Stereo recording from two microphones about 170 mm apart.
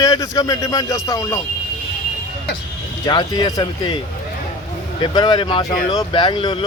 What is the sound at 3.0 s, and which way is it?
Speech, 25° left (ahead or behind).